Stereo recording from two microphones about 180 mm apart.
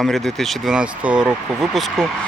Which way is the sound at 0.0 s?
Centre (ahead or behind).